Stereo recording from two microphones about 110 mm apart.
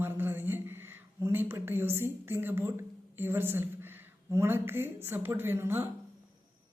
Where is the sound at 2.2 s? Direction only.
20° right (ahead or behind).